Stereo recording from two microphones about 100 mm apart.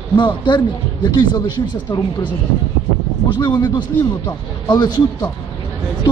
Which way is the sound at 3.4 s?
45° left (ahead or behind).